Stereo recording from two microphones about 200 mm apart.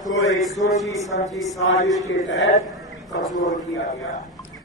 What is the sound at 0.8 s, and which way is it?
Music, 15° left (ahead or behind).